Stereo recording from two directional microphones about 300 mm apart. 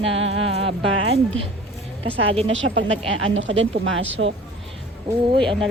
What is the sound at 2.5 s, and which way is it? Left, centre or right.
Speech, right.